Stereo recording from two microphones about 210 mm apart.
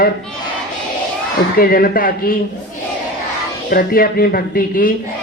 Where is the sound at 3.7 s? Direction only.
45° left (ahead or behind).